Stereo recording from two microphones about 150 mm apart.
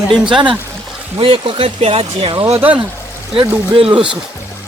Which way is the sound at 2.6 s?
10° right (ahead or behind).